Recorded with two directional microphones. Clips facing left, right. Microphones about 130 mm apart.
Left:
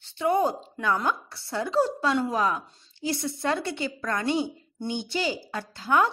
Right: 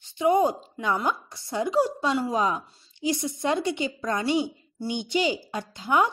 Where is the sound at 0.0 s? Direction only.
15° right (ahead or behind).